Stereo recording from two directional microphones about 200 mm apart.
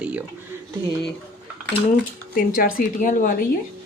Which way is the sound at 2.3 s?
45° left (ahead or behind).